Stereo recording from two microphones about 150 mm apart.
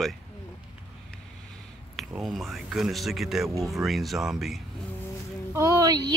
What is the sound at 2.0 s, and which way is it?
Speech, centre (ahead or behind).